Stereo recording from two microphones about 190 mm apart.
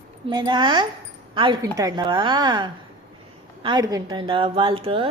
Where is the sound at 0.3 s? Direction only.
20° right (ahead or behind).